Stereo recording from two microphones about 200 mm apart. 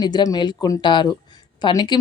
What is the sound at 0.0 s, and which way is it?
Speech, 20° left (ahead or behind).